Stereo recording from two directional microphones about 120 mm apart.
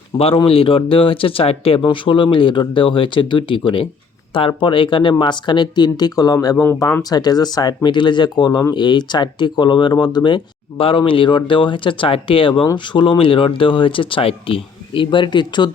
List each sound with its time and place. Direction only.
0.2 s speech: 50° left (ahead or behind)